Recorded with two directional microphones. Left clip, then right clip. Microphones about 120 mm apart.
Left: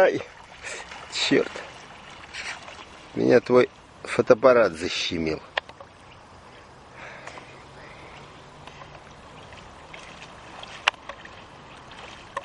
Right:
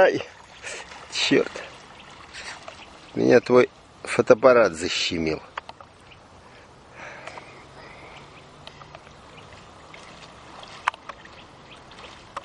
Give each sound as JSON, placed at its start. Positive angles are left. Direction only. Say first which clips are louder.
{"t": 0.0, "sound": "speech", "louder": "right 2 dB", "side_deg": -15}
{"t": 0.8, "sound": "a sound", "louder": "left 2 dB", "side_deg": 0}
{"t": 1.1, "sound": "a sound", "louder": "right 1 dB", "side_deg": -15}
{"t": 1.4, "sound": "speech", "louder": "right 1 dB", "side_deg": 0}
{"t": 2.3, "sound": "boat", "louder": "left 3 dB", "side_deg": 15}
{"t": 3.2, "sound": "speech", "louder": "right 1 dB", "side_deg": -15}
{"t": 4.6, "sound": "speech", "louder": "right 2 dB", "side_deg": -15}
{"t": 10.5, "sound": "rowboat", "louder": "left 1 dB", "side_deg": 0}